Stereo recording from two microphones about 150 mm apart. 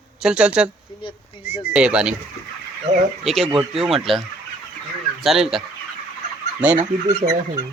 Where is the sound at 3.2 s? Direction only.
Centre (ahead or behind).